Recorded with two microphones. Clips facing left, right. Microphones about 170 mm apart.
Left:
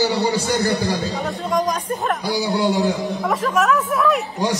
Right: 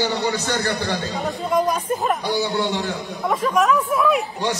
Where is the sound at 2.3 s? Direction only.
10° left (ahead or behind).